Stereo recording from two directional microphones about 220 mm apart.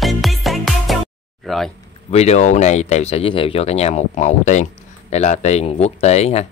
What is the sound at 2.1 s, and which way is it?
Speech, 30° left (ahead or behind).